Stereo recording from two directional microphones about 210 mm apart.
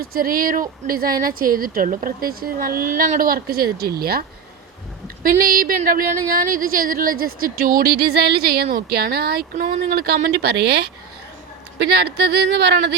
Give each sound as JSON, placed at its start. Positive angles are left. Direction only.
{"t": 0.0, "sound": "speech", "side_deg": -45}
{"t": 5.2, "sound": "speech", "side_deg": -45}